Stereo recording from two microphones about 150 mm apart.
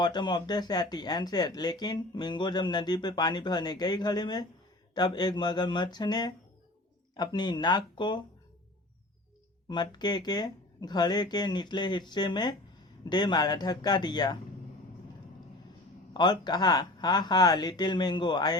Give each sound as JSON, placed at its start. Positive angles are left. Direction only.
{"t": 0.0, "sound": "speech", "side_deg": 30}
{"t": 9.6, "sound": "speech", "side_deg": 30}
{"t": 16.1, "sound": "speech", "side_deg": 30}